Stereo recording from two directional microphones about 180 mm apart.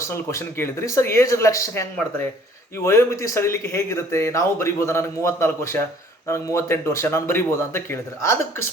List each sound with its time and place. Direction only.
0.0 s speech: 15° left (ahead or behind)